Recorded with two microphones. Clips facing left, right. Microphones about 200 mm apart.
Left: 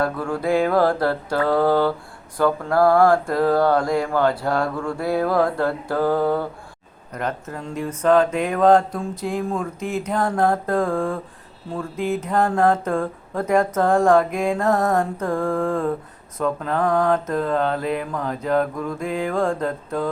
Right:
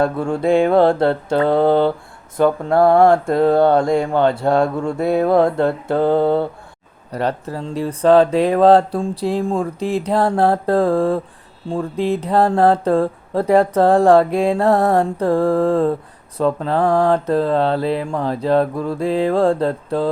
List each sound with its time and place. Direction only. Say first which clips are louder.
0.0 s speech: right 5 dB; 25° right (ahead or behind)